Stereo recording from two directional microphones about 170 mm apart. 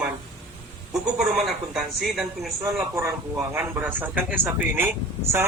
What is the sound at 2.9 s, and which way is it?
Speech, 15° right (ahead or behind).